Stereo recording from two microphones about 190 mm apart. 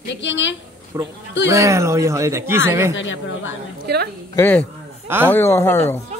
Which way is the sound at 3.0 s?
75° left (ahead or behind).